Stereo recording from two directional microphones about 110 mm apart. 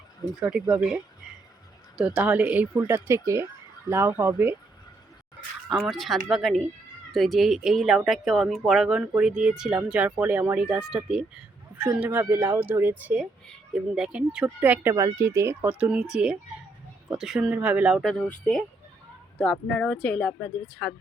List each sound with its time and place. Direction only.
0.4 s speech: 10° right (ahead or behind)
5.6 s speech: centre (ahead or behind)
17.5 s speech: 15° right (ahead or behind)
18.0 s speech: 5° left (ahead or behind)